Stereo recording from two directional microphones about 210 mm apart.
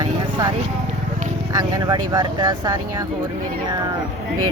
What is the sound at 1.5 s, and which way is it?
Speech, 20° right (ahead or behind).